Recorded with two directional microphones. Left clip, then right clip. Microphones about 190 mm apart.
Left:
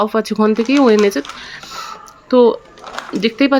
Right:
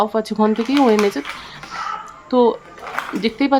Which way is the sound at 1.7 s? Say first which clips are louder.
Right 8 dB; 5° left (ahead or behind).